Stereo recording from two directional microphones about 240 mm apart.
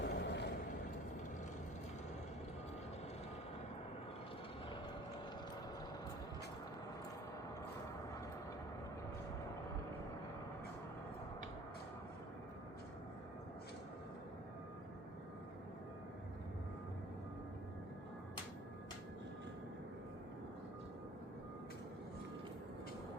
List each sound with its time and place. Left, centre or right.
0.0 s vehicle: left